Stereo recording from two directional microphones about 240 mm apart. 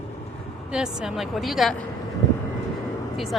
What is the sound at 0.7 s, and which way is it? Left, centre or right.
Speech, centre.